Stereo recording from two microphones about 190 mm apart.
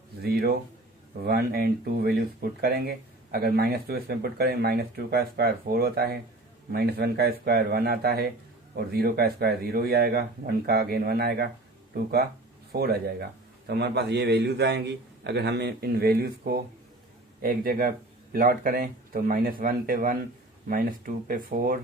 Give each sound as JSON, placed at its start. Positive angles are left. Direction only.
{"t": 0.2, "sound": "a man's voice", "side_deg": -55}
{"t": 12.7, "sound": "a man's voice", "side_deg": -55}